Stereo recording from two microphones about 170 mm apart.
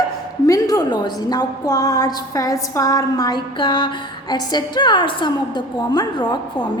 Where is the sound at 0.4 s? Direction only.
20° left (ahead or behind).